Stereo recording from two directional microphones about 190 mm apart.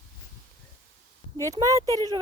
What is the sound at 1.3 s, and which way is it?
Speech, 15° right (ahead or behind).